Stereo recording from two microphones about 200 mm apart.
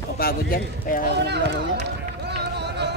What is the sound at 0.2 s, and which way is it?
Speech, 45° left (ahead or behind).